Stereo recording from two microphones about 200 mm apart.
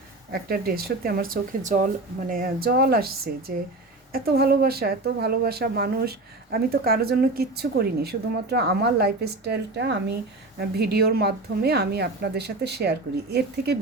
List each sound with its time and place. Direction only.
0.3 s speech: 50° right (ahead or behind)